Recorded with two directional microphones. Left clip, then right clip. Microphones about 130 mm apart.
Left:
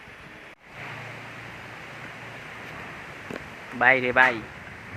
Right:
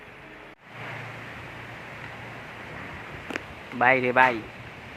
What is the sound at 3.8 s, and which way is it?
Speech, 15° right (ahead or behind).